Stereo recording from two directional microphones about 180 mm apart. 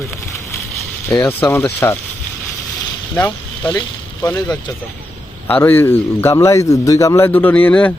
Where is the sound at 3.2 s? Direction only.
10° left (ahead or behind).